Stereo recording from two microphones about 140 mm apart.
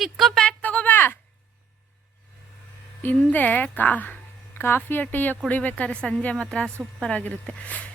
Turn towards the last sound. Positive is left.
turn(degrees=10)  # may be behind; listen again after turning